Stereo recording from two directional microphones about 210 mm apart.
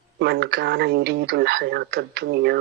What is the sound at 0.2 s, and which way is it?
Speech, 50° right (ahead or behind).